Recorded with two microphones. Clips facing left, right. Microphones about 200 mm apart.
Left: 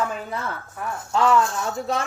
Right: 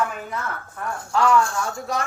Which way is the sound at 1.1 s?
20° left (ahead or behind).